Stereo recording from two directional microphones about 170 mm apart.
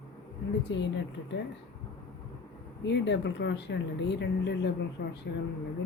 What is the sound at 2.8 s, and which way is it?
A woman's voice, 90° left.